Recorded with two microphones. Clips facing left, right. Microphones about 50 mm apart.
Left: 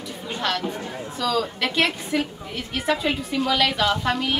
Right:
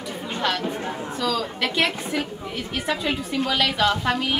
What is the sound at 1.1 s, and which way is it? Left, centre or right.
A woman's voice, centre.